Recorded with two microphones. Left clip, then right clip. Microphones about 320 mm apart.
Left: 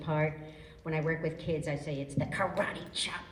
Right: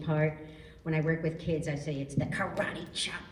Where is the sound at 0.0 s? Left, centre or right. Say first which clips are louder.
Right 1 dB; left.